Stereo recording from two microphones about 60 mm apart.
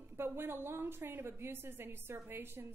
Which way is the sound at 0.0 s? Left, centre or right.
Right.